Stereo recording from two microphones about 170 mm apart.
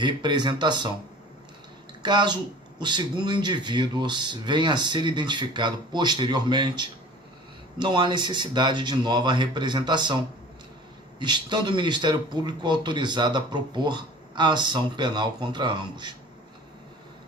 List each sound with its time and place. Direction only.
0.0 s speech: 25° right (ahead or behind)
2.0 s speech: 25° right (ahead or behind)
11.2 s speech: 25° right (ahead or behind)